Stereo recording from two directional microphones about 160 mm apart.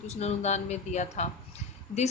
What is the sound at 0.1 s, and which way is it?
A woman's voice, 45° left (ahead or behind).